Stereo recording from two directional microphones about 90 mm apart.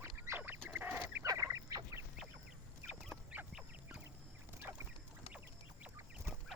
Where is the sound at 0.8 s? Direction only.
20° right (ahead or behind).